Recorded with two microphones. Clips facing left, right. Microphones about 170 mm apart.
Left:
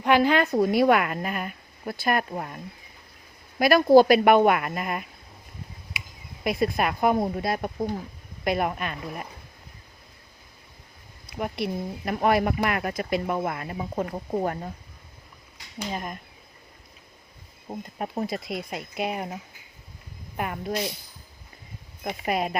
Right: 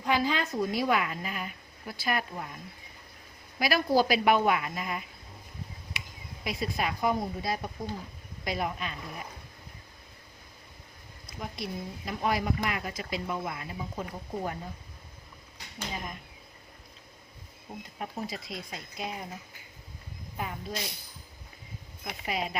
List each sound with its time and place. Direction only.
0.0 s speech: 65° left (ahead or behind)
3.6 s speech: 55° left (ahead or behind)
6.4 s speech: 55° left (ahead or behind)
11.3 s speech: 65° left (ahead or behind)
17.7 s speech: 50° left (ahead or behind)
22.0 s speech: 55° left (ahead or behind)